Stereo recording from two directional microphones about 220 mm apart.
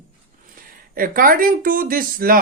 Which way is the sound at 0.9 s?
40° right (ahead or behind).